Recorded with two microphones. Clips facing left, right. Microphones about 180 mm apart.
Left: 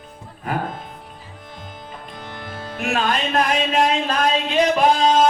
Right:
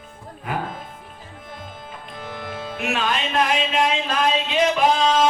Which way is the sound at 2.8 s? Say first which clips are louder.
Left 3 dB; 40° left (ahead or behind).